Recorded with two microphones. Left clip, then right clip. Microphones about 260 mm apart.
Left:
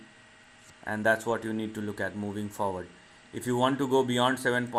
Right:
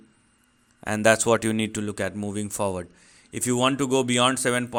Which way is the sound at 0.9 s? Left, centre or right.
Right.